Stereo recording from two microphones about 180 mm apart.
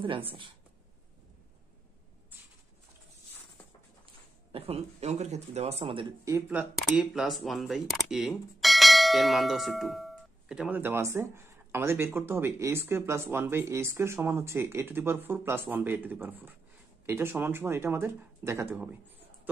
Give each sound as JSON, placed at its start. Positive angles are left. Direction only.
{"t": 0.0, "sound": "speech", "side_deg": -30}
{"t": 4.5, "sound": "speech", "side_deg": -35}
{"t": 6.2, "sound": "speech", "side_deg": -10}